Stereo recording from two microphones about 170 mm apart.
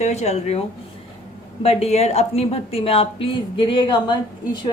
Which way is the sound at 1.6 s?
40° left (ahead or behind).